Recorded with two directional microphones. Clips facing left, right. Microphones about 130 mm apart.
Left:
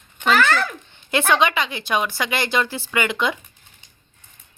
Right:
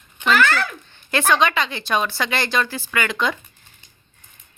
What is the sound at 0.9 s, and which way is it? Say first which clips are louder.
Speech: even; 20° left (ahead or behind).